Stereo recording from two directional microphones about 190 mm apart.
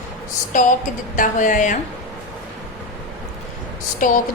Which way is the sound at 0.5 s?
45° left (ahead or behind).